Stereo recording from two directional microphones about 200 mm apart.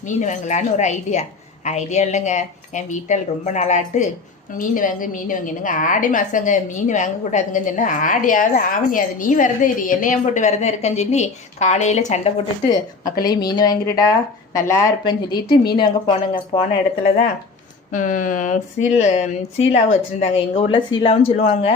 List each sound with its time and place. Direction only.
0.2 s a woman's voice: 35° left (ahead or behind)
13.2 s a woman's voice: 20° left (ahead or behind)
17.9 s a woman's voice: 40° left (ahead or behind)